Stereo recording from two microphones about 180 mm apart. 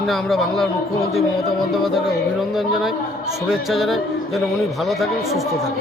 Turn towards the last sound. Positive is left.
turn(degrees=0)  # may be behind; listen again after turning